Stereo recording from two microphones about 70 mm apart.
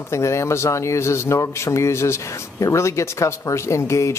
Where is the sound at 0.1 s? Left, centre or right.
Left.